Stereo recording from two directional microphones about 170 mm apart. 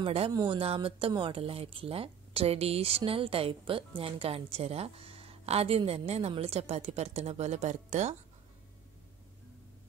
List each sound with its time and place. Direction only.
0.0 s speech: 35° right (ahead or behind)